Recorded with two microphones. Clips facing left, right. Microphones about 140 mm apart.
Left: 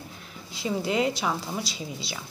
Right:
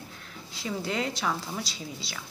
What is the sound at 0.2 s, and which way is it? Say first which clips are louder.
A woman's voice: left 5 dB; 15° left (ahead or behind).